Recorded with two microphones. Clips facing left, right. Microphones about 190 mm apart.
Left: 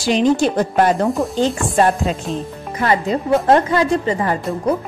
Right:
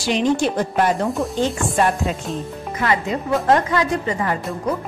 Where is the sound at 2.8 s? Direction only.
35° left (ahead or behind).